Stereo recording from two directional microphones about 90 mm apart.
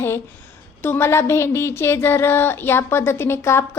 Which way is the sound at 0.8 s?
25° left (ahead or behind).